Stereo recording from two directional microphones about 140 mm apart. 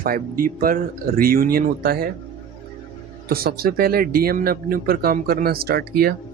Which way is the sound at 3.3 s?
90° right.